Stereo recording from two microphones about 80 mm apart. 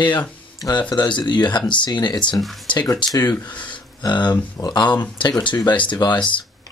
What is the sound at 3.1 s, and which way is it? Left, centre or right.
Speech, left.